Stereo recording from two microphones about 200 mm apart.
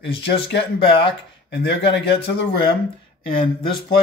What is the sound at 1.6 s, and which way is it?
Speech, 55° left (ahead or behind).